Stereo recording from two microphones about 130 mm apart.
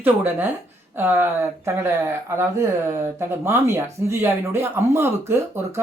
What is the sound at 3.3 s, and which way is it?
Speech, 20° right (ahead or behind).